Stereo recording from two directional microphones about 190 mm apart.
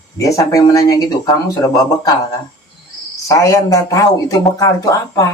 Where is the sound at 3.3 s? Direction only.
20° left (ahead or behind).